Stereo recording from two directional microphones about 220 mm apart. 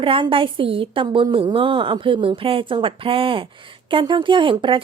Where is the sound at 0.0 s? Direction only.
25° right (ahead or behind).